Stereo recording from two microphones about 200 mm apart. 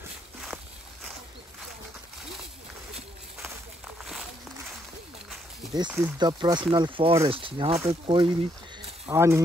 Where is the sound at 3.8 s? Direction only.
Centre (ahead or behind).